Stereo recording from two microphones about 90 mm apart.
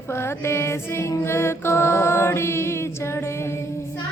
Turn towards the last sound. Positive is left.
turn(degrees=30)  # may be behind; listen again after turning